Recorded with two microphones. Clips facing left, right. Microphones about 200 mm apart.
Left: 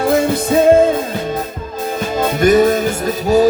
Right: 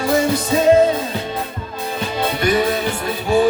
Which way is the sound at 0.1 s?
55° left (ahead or behind).